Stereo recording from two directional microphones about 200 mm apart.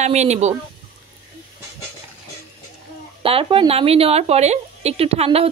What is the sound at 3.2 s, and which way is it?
A woman's voice, 25° right (ahead or behind).